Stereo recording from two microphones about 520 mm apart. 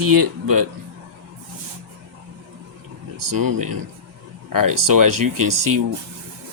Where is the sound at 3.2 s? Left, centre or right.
Right.